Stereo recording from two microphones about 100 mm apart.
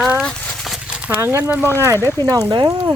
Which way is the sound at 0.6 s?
5° right (ahead or behind).